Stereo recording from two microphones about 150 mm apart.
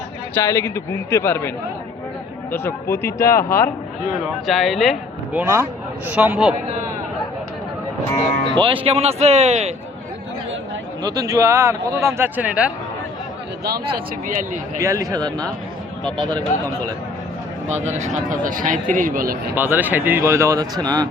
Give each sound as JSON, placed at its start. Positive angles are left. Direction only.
{"t": 0.3, "sound": "speech", "side_deg": 15}
{"t": 4.4, "sound": "speech", "side_deg": 0}
{"t": 8.5, "sound": "a man's voice", "side_deg": -35}
{"t": 11.0, "sound": "speech", "side_deg": -25}
{"t": 13.7, "sound": "speech", "side_deg": -90}
{"t": 14.8, "sound": "speech", "side_deg": -20}
{"t": 17.7, "sound": "speech", "side_deg": -50}
{"t": 19.5, "sound": "speech", "side_deg": -15}